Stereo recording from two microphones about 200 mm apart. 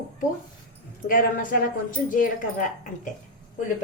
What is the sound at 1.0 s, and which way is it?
A woman's voice, 45° left (ahead or behind).